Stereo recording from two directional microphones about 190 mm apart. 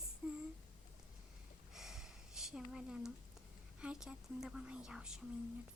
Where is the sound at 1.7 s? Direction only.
Centre (ahead or behind).